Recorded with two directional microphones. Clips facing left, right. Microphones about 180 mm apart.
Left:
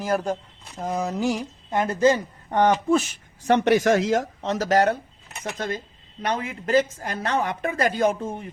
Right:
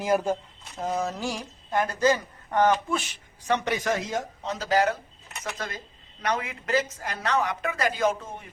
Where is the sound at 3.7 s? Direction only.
85° left.